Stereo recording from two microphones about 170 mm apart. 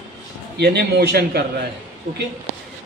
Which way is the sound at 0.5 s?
75° right (ahead or behind).